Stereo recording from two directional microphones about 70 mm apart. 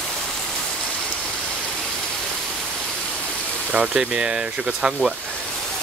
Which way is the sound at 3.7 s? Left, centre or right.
Centre.